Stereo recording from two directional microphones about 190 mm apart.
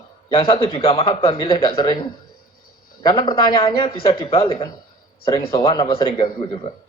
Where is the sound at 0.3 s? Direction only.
30° left (ahead or behind).